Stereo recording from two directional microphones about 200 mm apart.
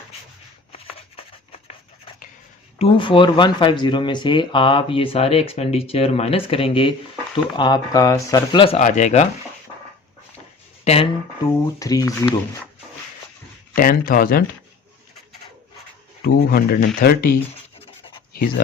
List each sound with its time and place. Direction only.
0.7 s a sound: 30° left (ahead or behind)
2.7 s speech: 30° left (ahead or behind)
10.8 s speech: 30° left (ahead or behind)
11.8 s speech: 15° left (ahead or behind)
13.7 s speech: 45° left (ahead or behind)
16.2 s speech: 50° left (ahead or behind)
17.7 s a sound: 30° left (ahead or behind)
18.3 s speech: 45° left (ahead or behind)